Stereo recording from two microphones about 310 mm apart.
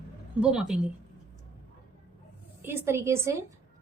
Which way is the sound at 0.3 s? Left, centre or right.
Centre.